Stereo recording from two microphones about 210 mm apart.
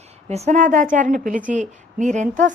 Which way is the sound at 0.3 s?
30° right (ahead or behind).